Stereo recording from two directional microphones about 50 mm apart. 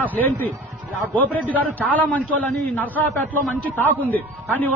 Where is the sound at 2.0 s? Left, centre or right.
Left.